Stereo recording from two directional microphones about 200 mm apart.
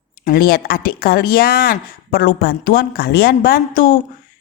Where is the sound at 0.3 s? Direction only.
50° left (ahead or behind).